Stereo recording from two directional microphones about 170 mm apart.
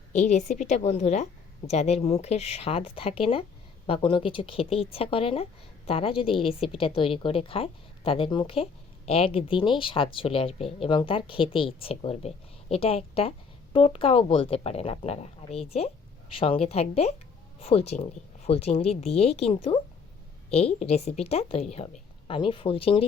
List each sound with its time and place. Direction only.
0.1 s speech: 45° left (ahead or behind)